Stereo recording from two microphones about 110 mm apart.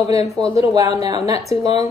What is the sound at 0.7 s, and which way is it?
A woman's voice, 35° right (ahead or behind).